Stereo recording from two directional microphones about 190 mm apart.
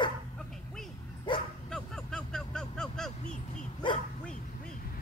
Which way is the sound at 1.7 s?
Centre (ahead or behind).